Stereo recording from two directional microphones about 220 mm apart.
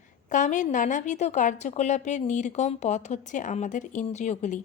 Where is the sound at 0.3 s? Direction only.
35° left (ahead or behind).